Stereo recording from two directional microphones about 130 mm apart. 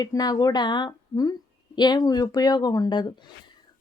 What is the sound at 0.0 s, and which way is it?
Speech, 30° left (ahead or behind).